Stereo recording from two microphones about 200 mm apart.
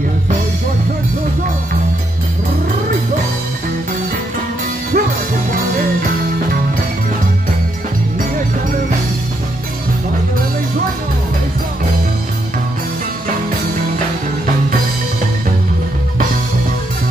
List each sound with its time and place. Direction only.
4.9 s music: 40° right (ahead or behind)